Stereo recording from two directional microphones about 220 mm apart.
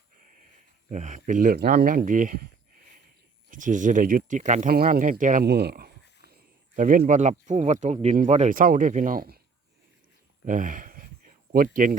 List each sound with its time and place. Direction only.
0.9 s speech: 35° right (ahead or behind)
3.5 s speech: 35° right (ahead or behind)
10.4 s speech: 35° right (ahead or behind)